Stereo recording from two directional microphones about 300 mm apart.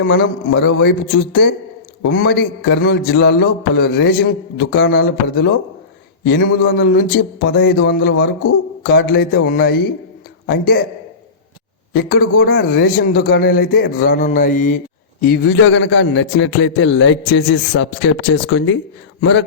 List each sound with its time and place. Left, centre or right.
0.0 s a man's voice: left
11.9 s a man's voice: left